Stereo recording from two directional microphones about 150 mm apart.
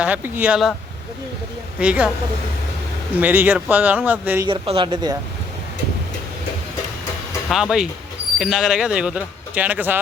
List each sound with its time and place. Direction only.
0.0 s speech: 10° right (ahead or behind)
1.8 s speech: 5° right (ahead or behind)
3.2 s speech: 10° right (ahead or behind)
4.4 s speech: 35° right (ahead or behind)
7.5 s speech: 5° right (ahead or behind)